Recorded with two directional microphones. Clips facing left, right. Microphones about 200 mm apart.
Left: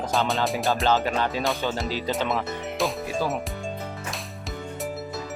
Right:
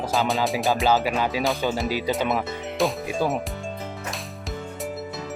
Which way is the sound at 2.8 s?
Centre (ahead or behind).